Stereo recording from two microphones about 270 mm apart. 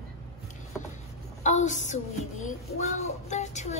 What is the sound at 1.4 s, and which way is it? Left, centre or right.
Speech, left.